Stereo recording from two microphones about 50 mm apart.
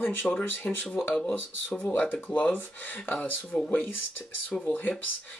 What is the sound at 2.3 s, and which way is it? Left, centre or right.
Speech, left.